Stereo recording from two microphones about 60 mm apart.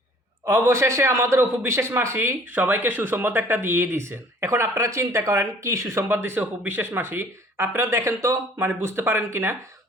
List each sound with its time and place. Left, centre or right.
0.4 s speech: right
2.6 s speech: right
7.9 s speech: right